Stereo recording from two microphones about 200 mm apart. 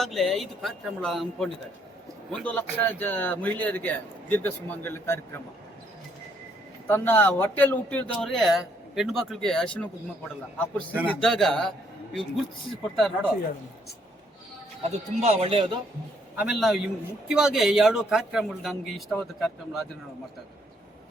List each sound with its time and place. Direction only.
0.0 s a man's voice: centre (ahead or behind)
6.8 s a man's voice: 10° left (ahead or behind)
12.7 s a man's voice: centre (ahead or behind)
14.8 s speech: 30° right (ahead or behind)
16.3 s a man's voice: 5° right (ahead or behind)